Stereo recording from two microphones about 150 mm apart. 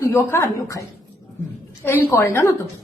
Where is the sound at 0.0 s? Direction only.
20° left (ahead or behind).